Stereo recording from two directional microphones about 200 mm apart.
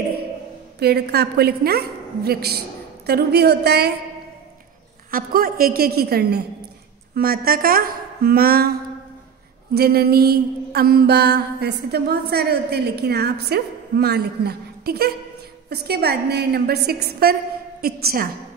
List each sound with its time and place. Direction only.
0.7 s mantra: 55° right (ahead or behind)
3.1 s speech: 55° right (ahead or behind)
5.1 s mantra: 45° right (ahead or behind)
9.8 s mantra: 50° right (ahead or behind)